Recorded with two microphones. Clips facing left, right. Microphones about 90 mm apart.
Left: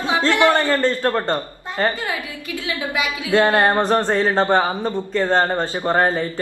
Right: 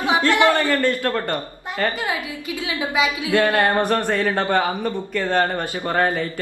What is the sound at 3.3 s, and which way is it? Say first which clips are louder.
Speech: left 4 dB; 25° left (ahead or behind).